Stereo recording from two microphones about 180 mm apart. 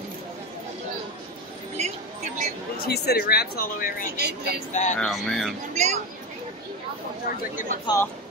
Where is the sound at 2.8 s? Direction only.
65° left (ahead or behind).